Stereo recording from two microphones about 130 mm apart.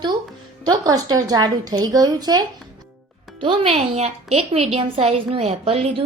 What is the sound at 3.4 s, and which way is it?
A woman's voice, 45° right (ahead or behind).